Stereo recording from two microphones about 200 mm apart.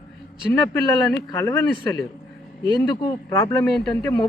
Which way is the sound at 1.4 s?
15° left (ahead or behind).